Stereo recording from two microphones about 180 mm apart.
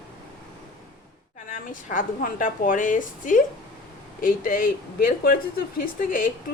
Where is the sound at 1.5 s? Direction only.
45° left (ahead or behind).